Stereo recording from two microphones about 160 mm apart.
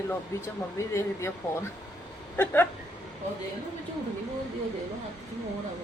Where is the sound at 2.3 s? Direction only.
15° left (ahead or behind).